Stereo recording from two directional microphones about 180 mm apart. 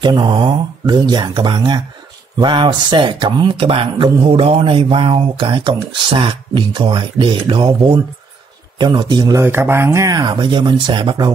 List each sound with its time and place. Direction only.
0.0 s speech: 25° right (ahead or behind)